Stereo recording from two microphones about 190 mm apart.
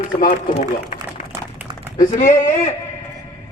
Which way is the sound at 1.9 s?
40° left (ahead or behind).